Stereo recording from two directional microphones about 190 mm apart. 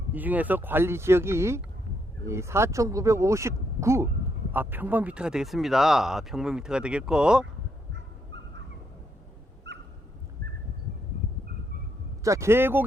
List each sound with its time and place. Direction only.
0.1 s speech: 10° right (ahead or behind)
12.2 s speech: 15° right (ahead or behind)